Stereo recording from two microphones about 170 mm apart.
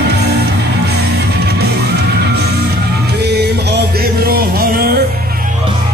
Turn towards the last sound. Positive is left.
turn(degrees=-60)  # may be behind; listen again after turning